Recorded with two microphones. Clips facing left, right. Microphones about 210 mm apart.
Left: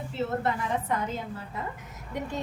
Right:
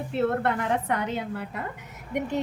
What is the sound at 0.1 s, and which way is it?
A woman's voice, 60° right (ahead or behind).